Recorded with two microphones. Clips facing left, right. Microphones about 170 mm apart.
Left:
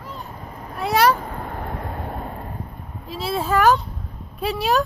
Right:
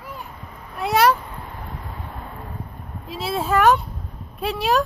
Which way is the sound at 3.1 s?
Centre (ahead or behind).